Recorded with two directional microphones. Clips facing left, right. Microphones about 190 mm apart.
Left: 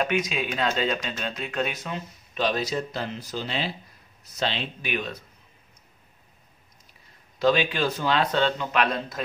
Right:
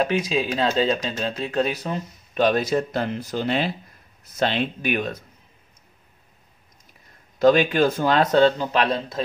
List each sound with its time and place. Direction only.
0.0 s speech: 35° right (ahead or behind)
2.3 s speech: 50° right (ahead or behind)
7.3 s speech: 50° right (ahead or behind); by 9.2 s 30° right (ahead or behind)